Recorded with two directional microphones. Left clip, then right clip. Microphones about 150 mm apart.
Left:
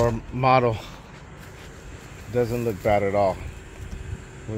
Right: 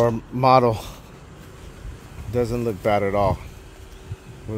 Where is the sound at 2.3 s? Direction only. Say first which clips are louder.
Right 1 dB; 40° right (ahead or behind).